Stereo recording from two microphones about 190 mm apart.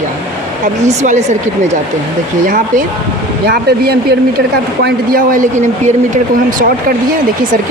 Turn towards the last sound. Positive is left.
turn(degrees=-45)  # may be behind; listen again after turning